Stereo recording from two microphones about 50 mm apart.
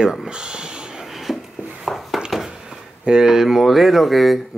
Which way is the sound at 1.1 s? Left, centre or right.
Centre.